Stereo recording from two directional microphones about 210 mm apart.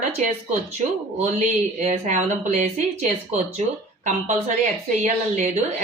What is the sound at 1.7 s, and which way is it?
Speech, 35° right (ahead or behind).